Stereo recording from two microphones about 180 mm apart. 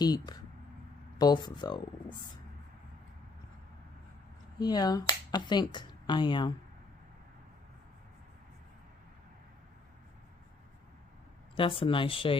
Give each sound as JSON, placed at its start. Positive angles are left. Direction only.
{"t": 0.0, "sound": "speech", "side_deg": 20}
{"t": 4.6, "sound": "speech", "side_deg": 20}
{"t": 11.5, "sound": "speech", "side_deg": 30}